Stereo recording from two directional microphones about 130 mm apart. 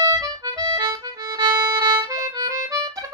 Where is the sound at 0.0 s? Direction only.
30° right (ahead or behind).